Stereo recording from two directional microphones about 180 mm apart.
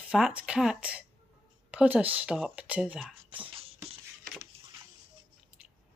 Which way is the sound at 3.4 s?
30° right (ahead or behind).